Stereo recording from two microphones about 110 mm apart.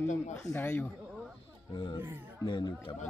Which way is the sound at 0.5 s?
20° left (ahead or behind).